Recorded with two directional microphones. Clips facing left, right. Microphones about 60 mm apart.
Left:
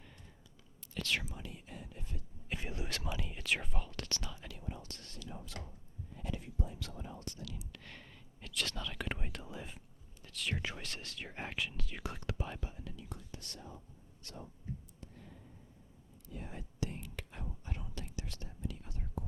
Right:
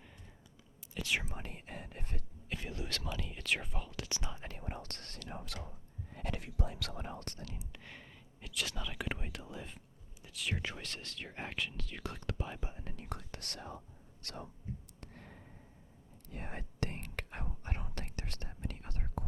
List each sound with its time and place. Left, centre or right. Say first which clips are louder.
0.9 s speech: right 1 dB; centre
1.2 s speech: right 2 dB; right
2.5 s speech: even; centre
4.1 s speech: right 1 dB; right
4.4 s speech: right 2 dB; right
7.4 s speech: left 1 dB; right
7.7 s speech: right 1 dB; centre
12.5 s speech: right 1 dB; right
12.8 s speech: even; right
13.1 s speech: right 4 dB; right
15.0 s a sound: right 1 dB; right
16.3 s whispering: right 2 dB; right